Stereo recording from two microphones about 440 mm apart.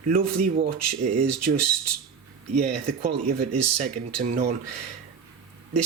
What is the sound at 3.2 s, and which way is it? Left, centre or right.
Speech, right.